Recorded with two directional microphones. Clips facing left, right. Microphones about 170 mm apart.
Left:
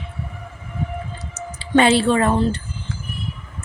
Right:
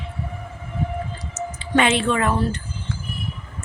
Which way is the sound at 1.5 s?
35° left (ahead or behind).